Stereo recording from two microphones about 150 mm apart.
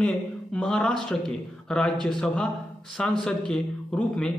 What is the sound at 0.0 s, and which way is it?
A man's voice, 5° left (ahead or behind).